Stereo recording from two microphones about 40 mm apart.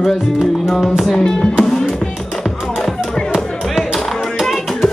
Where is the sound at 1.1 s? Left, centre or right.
Centre.